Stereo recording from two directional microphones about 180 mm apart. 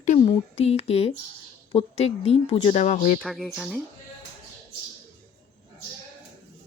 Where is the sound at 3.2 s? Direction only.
Centre (ahead or behind).